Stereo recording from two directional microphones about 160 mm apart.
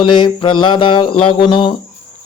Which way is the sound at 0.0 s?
30° left (ahead or behind).